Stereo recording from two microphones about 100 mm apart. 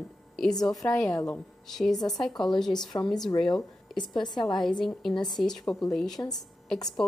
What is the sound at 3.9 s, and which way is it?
Speech, 45° left (ahead or behind).